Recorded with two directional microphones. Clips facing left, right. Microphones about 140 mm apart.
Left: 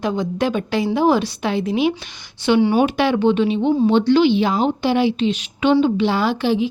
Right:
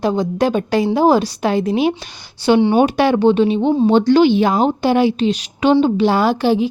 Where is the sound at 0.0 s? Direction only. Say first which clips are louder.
Right 4 dB; 35° right (ahead or behind).